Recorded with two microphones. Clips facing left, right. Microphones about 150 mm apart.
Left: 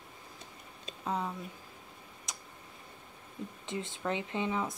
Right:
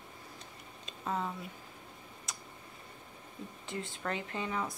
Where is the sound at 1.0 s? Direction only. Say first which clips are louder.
Left 1 dB; 15° left (ahead or behind).